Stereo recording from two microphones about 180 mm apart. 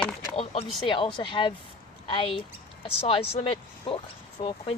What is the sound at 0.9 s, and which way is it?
Speech, 30° left (ahead or behind).